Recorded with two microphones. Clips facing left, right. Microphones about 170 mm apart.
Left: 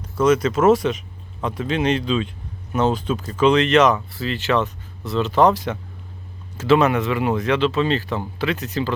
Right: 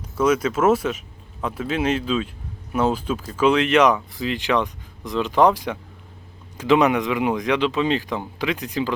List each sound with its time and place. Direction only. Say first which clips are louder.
0.2 s speech: left 2 dB; 10° right (ahead or behind)